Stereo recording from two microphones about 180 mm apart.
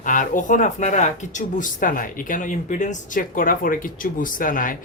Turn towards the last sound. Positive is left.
turn(degrees=50)  # may be behind; listen again after turning